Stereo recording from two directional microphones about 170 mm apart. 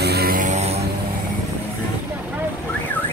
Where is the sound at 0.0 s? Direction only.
70° right (ahead or behind); by 0.8 s 40° right (ahead or behind).